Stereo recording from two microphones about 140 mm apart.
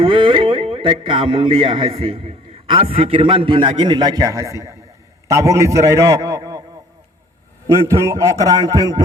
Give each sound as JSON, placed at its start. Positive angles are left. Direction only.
{"t": 0.0, "sound": "a man's voice", "side_deg": -35}
{"t": 7.9, "sound": "a man's voice", "side_deg": -20}